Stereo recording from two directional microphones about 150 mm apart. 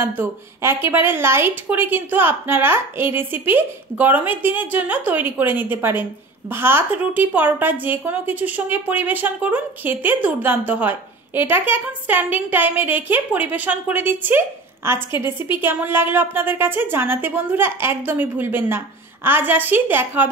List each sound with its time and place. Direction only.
0.0 s a woman's voice: 15° right (ahead or behind)